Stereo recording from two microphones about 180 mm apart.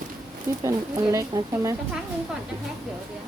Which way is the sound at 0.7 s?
15° right (ahead or behind).